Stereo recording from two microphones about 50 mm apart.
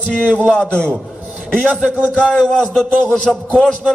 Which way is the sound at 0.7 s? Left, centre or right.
Left.